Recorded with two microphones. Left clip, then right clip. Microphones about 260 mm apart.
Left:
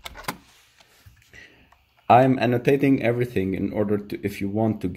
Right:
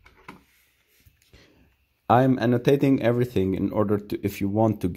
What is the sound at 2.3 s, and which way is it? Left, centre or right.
Speech, right.